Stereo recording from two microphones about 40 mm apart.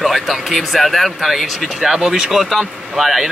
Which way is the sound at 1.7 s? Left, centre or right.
Centre.